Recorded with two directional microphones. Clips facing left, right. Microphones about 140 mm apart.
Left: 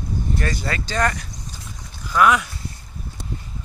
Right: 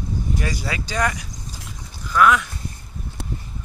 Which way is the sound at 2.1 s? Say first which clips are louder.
Even; 5° left (ahead or behind).